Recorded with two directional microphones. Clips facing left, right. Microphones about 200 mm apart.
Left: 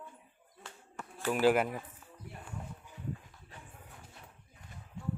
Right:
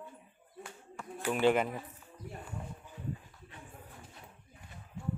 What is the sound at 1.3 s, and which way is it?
Speech, 5° left (ahead or behind).